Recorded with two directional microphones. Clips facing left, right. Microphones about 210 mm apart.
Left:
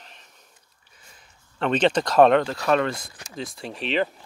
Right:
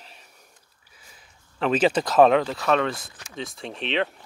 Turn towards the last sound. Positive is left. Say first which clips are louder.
# left 1 dB
turn(degrees=0)  # may be behind; listen again after turning